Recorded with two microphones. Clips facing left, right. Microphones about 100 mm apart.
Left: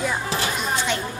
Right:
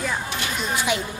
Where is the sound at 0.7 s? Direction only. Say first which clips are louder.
Right 3 dB; 10° right (ahead or behind).